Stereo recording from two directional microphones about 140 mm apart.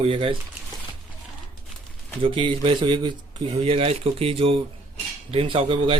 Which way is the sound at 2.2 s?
40° right (ahead or behind).